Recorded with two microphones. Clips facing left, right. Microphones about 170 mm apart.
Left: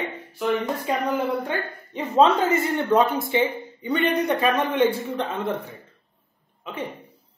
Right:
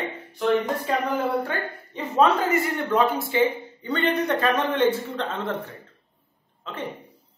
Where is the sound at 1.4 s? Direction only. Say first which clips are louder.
Left 1 dB; 20° left (ahead or behind).